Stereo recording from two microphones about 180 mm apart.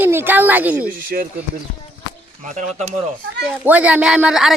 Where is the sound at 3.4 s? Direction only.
10° right (ahead or behind).